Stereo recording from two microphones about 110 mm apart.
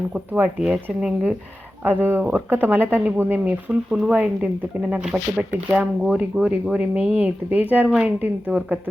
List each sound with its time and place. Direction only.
0.1 s speech: 10° right (ahead or behind)